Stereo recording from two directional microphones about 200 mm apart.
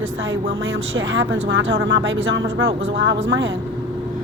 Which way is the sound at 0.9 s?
70° right (ahead or behind).